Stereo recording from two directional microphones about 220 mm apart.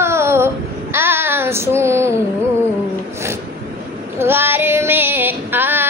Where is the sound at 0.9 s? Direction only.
10° right (ahead or behind).